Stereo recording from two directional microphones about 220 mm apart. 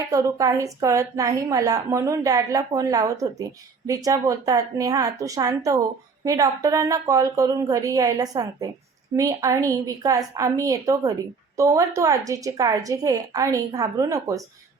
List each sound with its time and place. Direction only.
0.1 s a woman's voice: 15° right (ahead or behind)